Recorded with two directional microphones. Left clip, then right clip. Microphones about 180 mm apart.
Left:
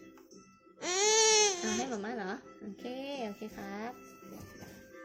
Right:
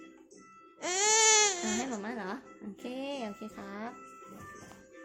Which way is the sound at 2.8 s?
25° right (ahead or behind).